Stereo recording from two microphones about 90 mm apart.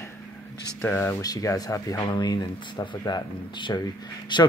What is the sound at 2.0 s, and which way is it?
Speech, 55° left (ahead or behind).